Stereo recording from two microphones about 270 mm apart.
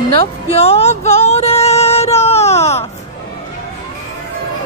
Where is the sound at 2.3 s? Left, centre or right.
Left.